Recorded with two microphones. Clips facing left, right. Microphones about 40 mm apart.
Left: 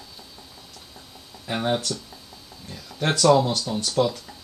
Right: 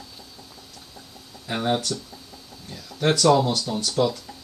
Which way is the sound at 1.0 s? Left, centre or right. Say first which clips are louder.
Right 1 dB; centre.